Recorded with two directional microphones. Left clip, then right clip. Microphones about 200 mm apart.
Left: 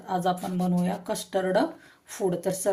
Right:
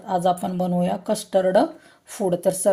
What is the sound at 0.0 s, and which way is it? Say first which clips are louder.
Speech: right 6 dB; 40° right (ahead or behind).